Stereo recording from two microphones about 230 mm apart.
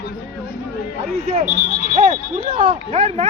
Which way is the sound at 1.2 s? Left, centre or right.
Right.